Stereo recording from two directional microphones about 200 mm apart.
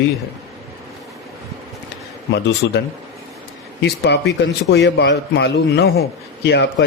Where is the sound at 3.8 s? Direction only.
55° left (ahead or behind).